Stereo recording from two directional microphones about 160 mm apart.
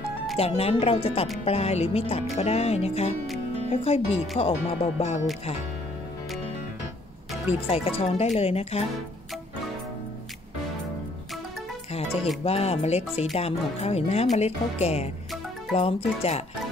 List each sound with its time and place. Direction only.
0.4 s speech: 40° left (ahead or behind)
7.6 s speech: 35° left (ahead or behind)
12.4 s speech: 40° left (ahead or behind)